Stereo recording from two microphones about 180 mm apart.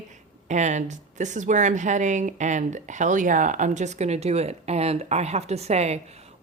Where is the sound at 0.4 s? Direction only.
40° right (ahead or behind).